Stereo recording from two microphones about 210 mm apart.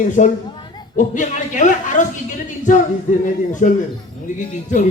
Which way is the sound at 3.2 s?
40° left (ahead or behind).